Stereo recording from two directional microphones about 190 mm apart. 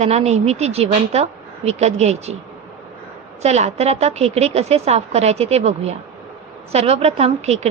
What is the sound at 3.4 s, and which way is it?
Speech, 35° right (ahead or behind).